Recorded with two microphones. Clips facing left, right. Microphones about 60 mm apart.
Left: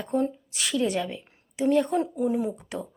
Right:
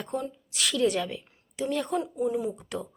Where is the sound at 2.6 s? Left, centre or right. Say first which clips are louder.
Even; centre.